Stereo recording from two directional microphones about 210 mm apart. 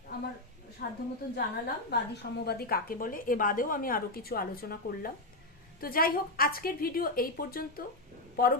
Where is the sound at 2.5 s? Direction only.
45° left (ahead or behind).